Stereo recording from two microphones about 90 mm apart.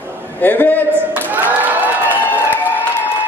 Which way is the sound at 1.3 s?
20° right (ahead or behind).